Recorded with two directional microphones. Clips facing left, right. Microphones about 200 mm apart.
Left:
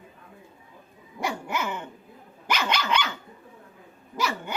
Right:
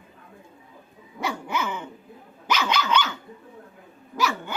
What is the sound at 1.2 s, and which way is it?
Dog, 10° left (ahead or behind).